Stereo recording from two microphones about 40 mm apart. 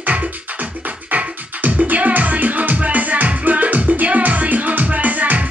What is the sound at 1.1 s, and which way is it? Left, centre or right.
Music, right.